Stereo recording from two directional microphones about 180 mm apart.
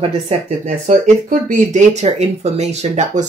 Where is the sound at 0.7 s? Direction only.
40° right (ahead or behind).